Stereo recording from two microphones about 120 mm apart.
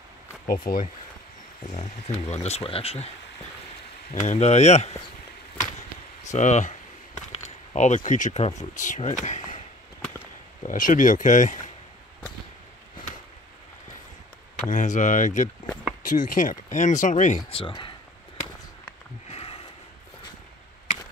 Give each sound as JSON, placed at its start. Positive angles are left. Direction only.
{"t": 1.7, "sound": "speech", "side_deg": 70}
{"t": 4.1, "sound": "speech", "side_deg": 75}
{"t": 5.6, "sound": "a sound", "side_deg": 80}
{"t": 7.4, "sound": "speech", "side_deg": 85}
{"t": 9.2, "sound": "a sound", "side_deg": 80}
{"t": 10.6, "sound": "speech", "side_deg": 90}
{"t": 14.7, "sound": "speech", "side_deg": 90}
{"t": 17.5, "sound": "speech", "side_deg": 45}
{"t": 19.2, "sound": "a sound", "side_deg": 55}